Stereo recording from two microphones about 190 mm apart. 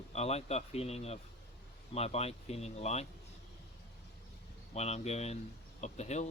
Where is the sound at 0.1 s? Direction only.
35° left (ahead or behind).